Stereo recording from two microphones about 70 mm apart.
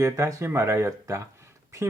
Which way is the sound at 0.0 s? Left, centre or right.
Right.